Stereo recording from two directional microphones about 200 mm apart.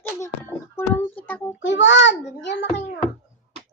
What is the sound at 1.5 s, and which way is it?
A child's voice, 65° left (ahead or behind).